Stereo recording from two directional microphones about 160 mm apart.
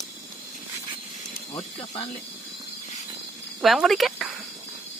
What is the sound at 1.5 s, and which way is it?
Speech, 30° left (ahead or behind).